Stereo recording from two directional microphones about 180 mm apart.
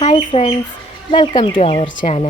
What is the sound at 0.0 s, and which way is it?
Speech, 35° left (ahead or behind).